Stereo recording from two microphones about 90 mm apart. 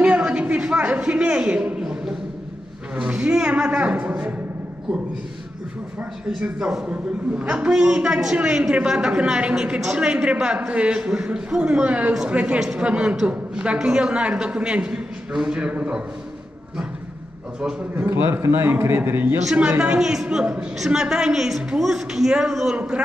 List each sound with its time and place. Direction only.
0.0 s a sound: 15° right (ahead or behind)
3.0 s a man's voice: 10° right (ahead or behind)
5.9 s a man's voice: 10° right (ahead or behind)
17.9 s a man's voice: 25° right (ahead or behind)